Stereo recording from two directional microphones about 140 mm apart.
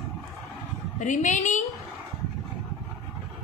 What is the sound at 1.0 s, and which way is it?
Speech, 60° left (ahead or behind).